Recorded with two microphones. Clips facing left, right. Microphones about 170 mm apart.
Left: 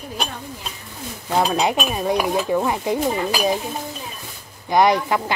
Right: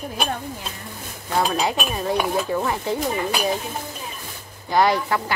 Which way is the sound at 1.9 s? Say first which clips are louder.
Left 2 dB; 15° left (ahead or behind).